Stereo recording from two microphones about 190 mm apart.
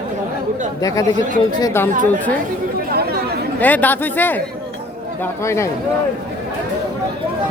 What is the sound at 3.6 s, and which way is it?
Speech, 10° left (ahead or behind).